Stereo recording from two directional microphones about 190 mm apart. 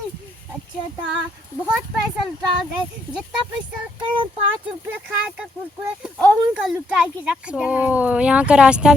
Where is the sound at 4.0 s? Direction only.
25° right (ahead or behind).